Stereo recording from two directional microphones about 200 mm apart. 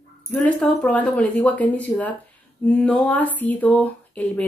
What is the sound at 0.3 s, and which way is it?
Speech, 5° left (ahead or behind).